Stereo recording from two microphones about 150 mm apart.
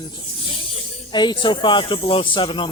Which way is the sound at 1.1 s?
30° left (ahead or behind).